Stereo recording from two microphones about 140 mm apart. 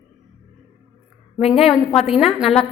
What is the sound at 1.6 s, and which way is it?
A woman's voice, centre (ahead or behind).